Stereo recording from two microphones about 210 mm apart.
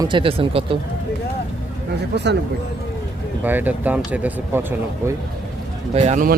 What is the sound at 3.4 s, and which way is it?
Speech, 10° right (ahead or behind).